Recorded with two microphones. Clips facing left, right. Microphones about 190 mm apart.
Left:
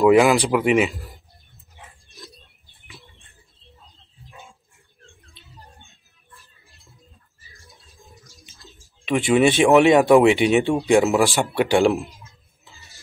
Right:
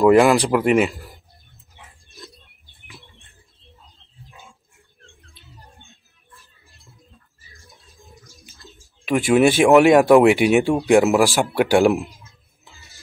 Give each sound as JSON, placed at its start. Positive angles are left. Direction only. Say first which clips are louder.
{"t": 0.0, "sound": "speech", "louder": "right 1 dB", "side_deg": 0}
{"t": 9.0, "sound": "speech", "louder": "right 2 dB", "side_deg": 0}